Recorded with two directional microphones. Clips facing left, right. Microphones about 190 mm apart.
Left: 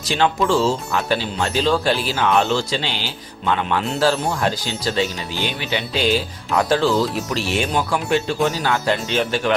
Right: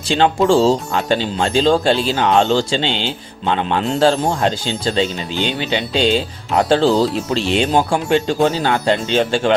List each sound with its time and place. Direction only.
0.1 s speech: 30° right (ahead or behind)